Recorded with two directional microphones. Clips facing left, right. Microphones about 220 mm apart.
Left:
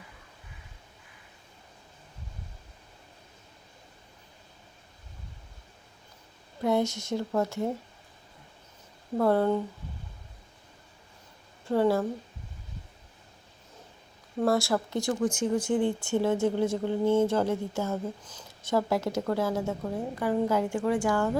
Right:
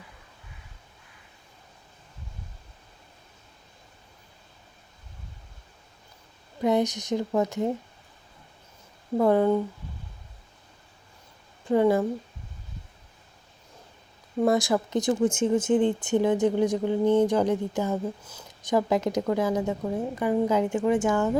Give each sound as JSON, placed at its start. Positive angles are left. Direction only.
{"t": 6.6, "sound": "speech", "side_deg": -20}
{"t": 9.1, "sound": "speech", "side_deg": -15}
{"t": 11.6, "sound": "a woman's voice", "side_deg": -15}
{"t": 14.4, "sound": "speech", "side_deg": -15}